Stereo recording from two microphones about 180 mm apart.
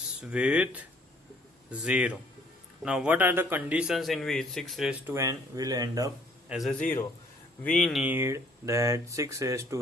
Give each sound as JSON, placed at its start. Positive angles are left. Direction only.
{"t": 0.2, "sound": "speech", "side_deg": -5}
{"t": 5.0, "sound": "speech", "side_deg": -15}
{"t": 6.5, "sound": "speech", "side_deg": 0}
{"t": 8.0, "sound": "speech", "side_deg": -10}